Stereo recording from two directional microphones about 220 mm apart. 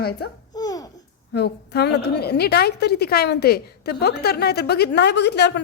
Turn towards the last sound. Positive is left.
turn(degrees=50)  # may be behind; listen again after turning